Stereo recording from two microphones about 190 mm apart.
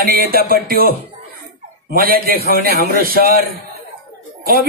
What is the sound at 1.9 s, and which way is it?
A woman's voice, 50° right (ahead or behind).